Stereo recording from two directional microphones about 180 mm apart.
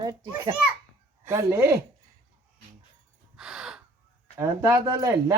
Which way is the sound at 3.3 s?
5° right (ahead or behind).